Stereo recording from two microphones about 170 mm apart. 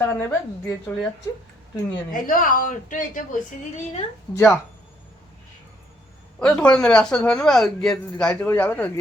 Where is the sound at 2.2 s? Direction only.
55° left (ahead or behind).